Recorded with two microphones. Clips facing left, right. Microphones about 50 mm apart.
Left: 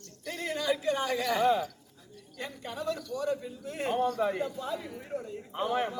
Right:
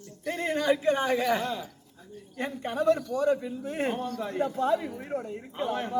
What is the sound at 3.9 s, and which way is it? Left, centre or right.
Speech, left.